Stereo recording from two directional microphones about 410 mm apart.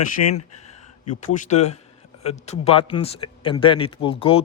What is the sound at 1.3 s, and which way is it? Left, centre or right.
Speech, centre.